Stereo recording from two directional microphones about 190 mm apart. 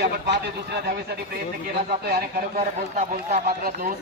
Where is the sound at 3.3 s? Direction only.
50° right (ahead or behind).